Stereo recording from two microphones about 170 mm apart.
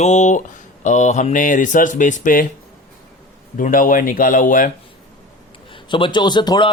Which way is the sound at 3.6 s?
55° left (ahead or behind).